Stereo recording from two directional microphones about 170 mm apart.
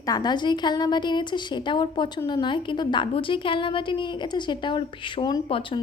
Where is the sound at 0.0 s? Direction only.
25° left (ahead or behind).